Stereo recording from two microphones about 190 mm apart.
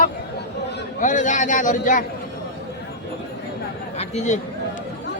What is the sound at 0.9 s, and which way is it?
A man's voice, 40° left (ahead or behind).